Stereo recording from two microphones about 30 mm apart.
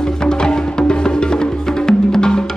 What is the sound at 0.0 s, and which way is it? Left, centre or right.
Music, left.